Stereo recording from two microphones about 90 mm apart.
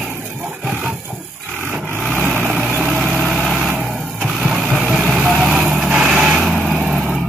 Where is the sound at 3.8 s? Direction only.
15° right (ahead or behind).